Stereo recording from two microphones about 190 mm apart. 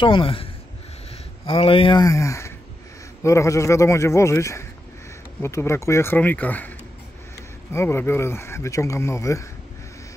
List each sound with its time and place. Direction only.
0.0 s speech: 25° left (ahead or behind); by 6.7 s 10° left (ahead or behind)
7.7 s speech: 15° left (ahead or behind)